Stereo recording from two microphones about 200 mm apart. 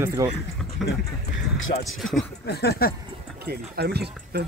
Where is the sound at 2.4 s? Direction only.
55° left (ahead or behind).